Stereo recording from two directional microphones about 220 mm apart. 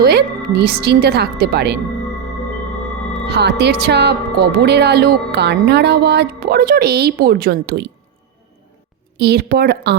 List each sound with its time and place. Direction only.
0.0 s speech: 45° right (ahead or behind)
3.2 s speech: 50° right (ahead or behind)
9.1 s speech: 50° right (ahead or behind)